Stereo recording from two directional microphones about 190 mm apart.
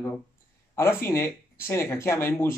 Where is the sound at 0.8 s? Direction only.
15° left (ahead or behind).